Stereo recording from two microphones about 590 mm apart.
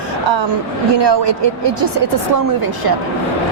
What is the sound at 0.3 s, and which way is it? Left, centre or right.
A woman's voice, right.